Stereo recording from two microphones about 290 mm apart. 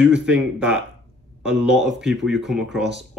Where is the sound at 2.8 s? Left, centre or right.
Right.